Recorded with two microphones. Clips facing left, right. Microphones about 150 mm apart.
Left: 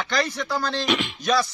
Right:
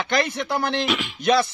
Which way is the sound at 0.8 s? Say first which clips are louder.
Left 1 dB; centre (ahead or behind).